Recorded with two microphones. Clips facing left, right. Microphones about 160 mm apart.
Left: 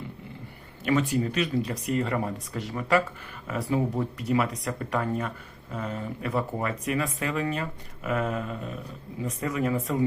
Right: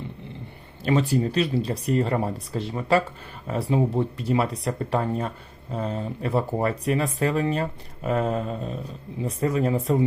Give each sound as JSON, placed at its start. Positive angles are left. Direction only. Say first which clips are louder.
{"t": 0.9, "sound": "speech", "louder": "right 3 dB", "side_deg": -30}